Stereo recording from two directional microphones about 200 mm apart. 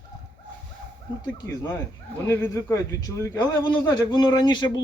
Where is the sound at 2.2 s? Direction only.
10° left (ahead or behind).